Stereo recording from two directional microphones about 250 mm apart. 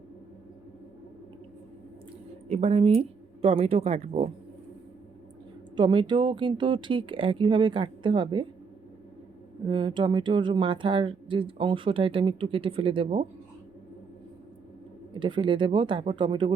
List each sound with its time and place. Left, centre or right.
2.5 s speech: right
5.7 s speech: centre
9.6 s speech: centre
15.1 s speech: centre